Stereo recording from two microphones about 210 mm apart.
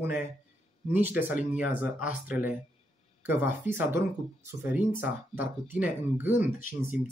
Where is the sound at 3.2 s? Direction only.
10° right (ahead or behind).